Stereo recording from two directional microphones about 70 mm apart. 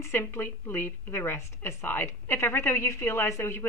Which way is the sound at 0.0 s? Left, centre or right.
Left.